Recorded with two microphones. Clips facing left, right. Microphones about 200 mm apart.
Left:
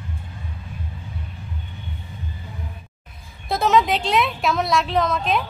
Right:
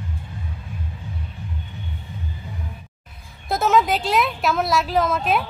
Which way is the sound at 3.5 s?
Centre (ahead or behind).